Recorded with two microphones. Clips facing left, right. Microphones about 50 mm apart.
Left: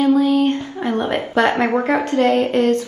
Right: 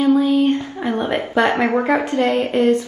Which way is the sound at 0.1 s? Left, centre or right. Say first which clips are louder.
Even; centre.